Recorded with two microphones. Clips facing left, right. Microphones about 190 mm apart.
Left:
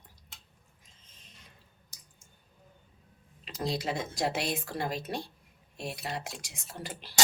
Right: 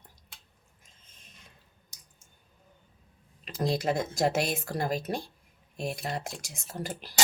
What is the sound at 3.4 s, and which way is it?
A woman's voice, 50° right (ahead or behind).